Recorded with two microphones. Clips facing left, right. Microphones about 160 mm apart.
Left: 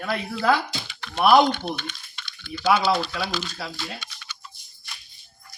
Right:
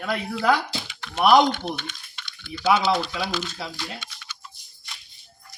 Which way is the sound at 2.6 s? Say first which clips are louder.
Even; 20° right (ahead or behind).